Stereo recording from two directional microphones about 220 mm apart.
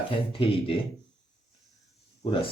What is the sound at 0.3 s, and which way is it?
Speech, 25° left (ahead or behind).